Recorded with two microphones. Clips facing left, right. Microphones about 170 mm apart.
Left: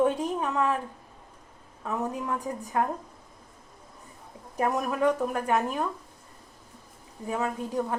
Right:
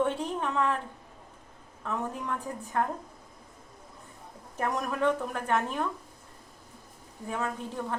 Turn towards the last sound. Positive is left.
turn(degrees=10)  # may be behind; listen again after turning